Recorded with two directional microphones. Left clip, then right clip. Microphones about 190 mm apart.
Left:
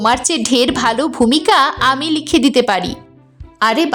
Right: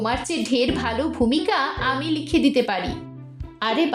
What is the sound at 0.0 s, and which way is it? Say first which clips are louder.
A woman's voice: left 10 dB; 45° left (ahead or behind).